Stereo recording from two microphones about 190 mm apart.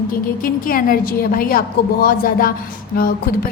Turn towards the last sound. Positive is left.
turn(degrees=50)  # may be behind; listen again after turning